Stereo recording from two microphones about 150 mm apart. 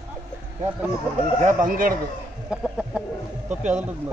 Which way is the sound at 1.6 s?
70° right (ahead or behind).